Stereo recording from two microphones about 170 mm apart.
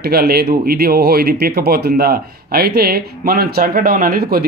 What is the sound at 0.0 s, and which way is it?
Speech, 65° right (ahead or behind).